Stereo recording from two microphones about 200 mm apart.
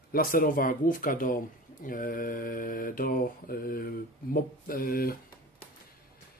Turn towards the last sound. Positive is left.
turn(degrees=45)  # may be behind; listen again after turning